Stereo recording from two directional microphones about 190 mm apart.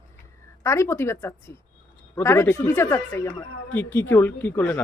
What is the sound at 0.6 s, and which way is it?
A woman's voice, 15° left (ahead or behind).